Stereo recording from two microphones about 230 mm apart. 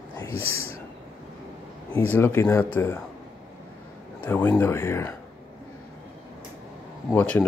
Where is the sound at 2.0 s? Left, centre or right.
Centre.